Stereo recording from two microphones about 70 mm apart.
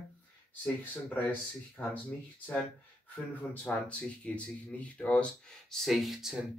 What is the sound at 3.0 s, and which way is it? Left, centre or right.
Speech, left.